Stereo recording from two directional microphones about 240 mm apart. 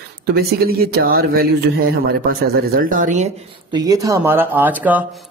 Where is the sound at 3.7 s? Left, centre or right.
Centre.